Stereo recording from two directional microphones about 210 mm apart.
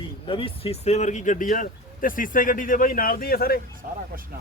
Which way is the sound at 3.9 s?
45° right (ahead or behind).